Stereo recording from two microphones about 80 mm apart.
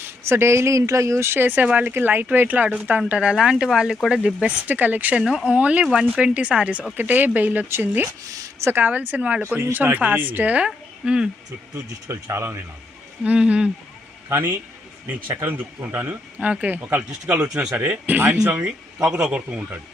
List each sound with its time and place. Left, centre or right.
0.0 s speech: right; by 4.5 s centre
4.6 s speech: right
5.2 s speech: centre; by 8.1 s right
8.3 s a sound: right
8.7 s speech: right
10.7 s speech: centre
12.0 s speech: right
13.2 s speech: centre
14.3 s a man's voice: right
16.4 s speech: centre
17.5 s speech: centre